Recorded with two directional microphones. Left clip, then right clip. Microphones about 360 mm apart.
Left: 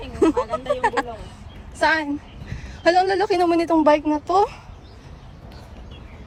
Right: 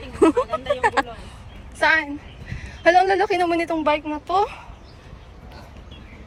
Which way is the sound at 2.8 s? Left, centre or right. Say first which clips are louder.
Right 2 dB; centre.